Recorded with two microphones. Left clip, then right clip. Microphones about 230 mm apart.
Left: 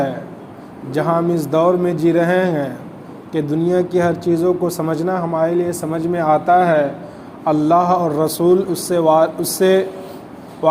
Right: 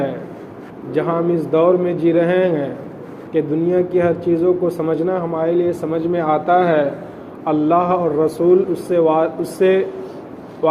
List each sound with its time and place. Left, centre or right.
0.9 s speech: left